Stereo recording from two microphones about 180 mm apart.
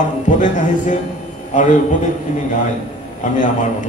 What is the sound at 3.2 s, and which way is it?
Speech, 45° left (ahead or behind).